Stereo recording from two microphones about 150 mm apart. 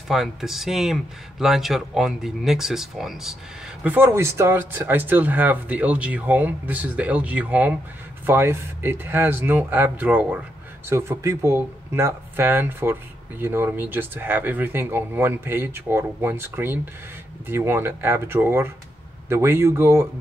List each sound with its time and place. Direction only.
0.1 s speech: centre (ahead or behind)
3.8 s speech: 15° right (ahead or behind)